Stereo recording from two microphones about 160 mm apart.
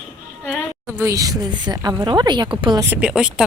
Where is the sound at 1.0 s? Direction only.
20° right (ahead or behind).